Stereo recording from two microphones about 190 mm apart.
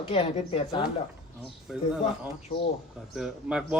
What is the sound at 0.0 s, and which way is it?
Speech, 30° left (ahead or behind).